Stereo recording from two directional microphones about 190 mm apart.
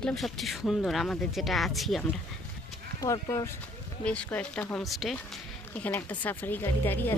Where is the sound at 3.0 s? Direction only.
15° left (ahead or behind).